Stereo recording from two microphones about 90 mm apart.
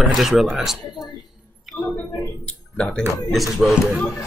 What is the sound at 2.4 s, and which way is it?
Speech, 15° left (ahead or behind).